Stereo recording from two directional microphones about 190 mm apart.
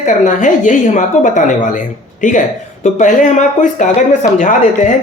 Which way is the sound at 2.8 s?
40° left (ahead or behind).